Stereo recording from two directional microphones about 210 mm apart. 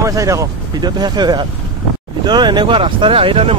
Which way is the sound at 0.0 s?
15° right (ahead or behind).